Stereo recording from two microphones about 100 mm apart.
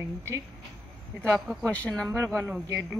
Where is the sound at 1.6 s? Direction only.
10° left (ahead or behind).